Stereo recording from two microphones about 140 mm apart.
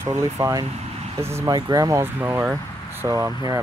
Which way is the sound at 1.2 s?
20° right (ahead or behind).